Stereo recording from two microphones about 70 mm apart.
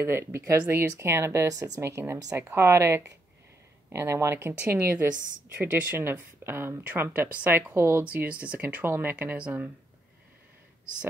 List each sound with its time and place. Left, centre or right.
0.0 s a woman's voice: right
5.6 s speech: right
7.7 s speech: right
8.0 s speech: right
8.6 s speech: right
9.4 s speech: centre